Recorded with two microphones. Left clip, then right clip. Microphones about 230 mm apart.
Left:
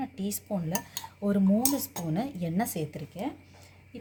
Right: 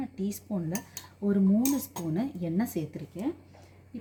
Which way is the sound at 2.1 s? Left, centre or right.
Left.